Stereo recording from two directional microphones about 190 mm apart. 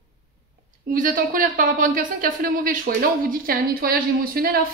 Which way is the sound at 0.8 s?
45° right (ahead or behind).